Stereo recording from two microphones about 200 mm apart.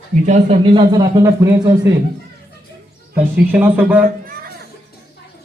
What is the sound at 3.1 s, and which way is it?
Speech, 10° right (ahead or behind).